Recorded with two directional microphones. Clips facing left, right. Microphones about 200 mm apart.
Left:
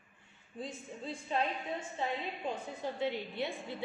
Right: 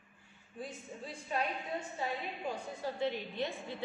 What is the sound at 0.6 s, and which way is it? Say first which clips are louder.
Speech: left 2 dB; 25° left (ahead or behind).